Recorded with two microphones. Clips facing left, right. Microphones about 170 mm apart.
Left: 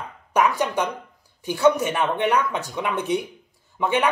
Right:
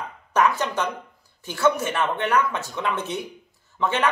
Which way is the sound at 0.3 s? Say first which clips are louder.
Left 1 dB; 15° left (ahead or behind).